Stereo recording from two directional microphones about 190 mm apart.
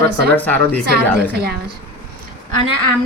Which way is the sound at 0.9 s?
55° right (ahead or behind).